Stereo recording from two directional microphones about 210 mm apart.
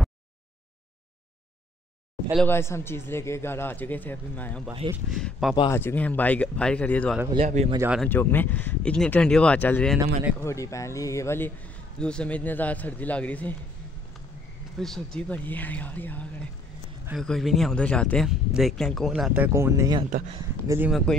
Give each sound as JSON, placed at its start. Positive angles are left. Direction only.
{"t": 2.3, "sound": "a man's voice", "side_deg": 10}
{"t": 5.7, "sound": "a man's voice", "side_deg": 10}
{"t": 7.3, "sound": "speech", "side_deg": -30}
{"t": 7.7, "sound": "speech", "side_deg": -10}
{"t": 8.0, "sound": "a man's voice", "side_deg": 10}
{"t": 14.8, "sound": "a man's voice", "side_deg": 5}